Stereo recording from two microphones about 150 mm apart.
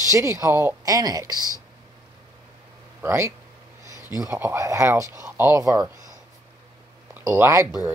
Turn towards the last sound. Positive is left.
turn(degrees=-20)  # may be behind; listen again after turning